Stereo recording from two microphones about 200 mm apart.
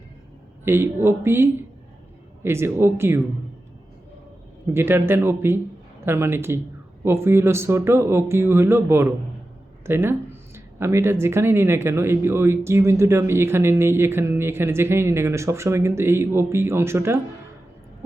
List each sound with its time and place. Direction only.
0.6 s speech: 10° right (ahead or behind)
4.7 s speech: 10° right (ahead or behind)